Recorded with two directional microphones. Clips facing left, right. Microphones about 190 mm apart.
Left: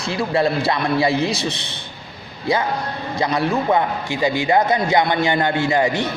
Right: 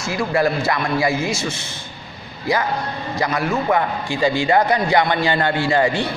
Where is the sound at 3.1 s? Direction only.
30° left (ahead or behind).